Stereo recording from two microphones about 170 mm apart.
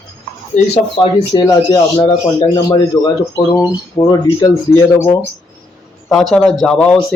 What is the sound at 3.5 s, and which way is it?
Speech, 15° left (ahead or behind).